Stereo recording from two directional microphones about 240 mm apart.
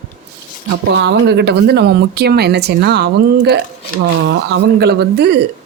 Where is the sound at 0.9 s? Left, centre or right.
Right.